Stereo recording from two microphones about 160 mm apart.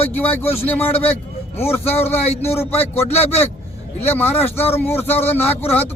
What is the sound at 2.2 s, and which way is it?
Speech, 45° left (ahead or behind).